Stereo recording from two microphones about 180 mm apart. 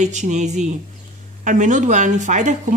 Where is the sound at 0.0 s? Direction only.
40° right (ahead or behind).